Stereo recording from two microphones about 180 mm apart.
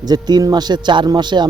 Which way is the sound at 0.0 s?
20° right (ahead or behind).